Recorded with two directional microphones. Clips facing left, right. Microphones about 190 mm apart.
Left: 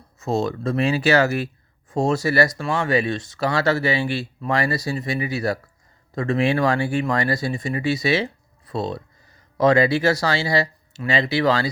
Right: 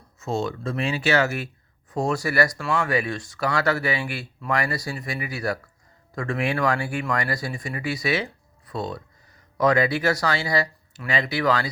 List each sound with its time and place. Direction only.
0.2 s speech: 35° left (ahead or behind)
1.9 s speech: 25° left (ahead or behind)